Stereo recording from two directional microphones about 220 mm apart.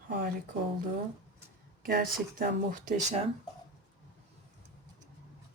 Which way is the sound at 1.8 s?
40° right (ahead or behind).